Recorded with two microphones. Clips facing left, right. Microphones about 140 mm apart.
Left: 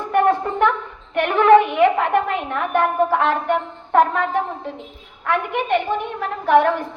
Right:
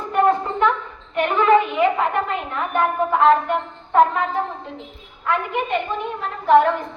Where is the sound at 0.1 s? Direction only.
65° left (ahead or behind).